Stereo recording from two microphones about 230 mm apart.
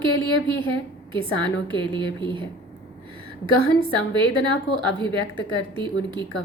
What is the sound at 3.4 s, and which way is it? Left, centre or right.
A woman's voice, right.